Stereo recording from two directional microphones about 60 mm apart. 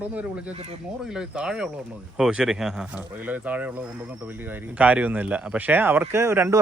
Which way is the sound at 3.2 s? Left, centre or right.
Right.